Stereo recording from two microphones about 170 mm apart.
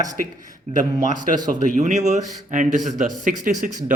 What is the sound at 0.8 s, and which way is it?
A man's voice, 50° right (ahead or behind).